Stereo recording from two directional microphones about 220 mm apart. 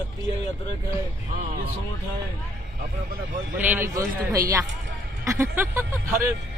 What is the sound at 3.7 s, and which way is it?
Speech, 10° right (ahead or behind).